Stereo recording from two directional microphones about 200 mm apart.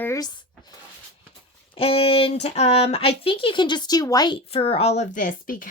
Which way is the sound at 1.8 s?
30° left (ahead or behind).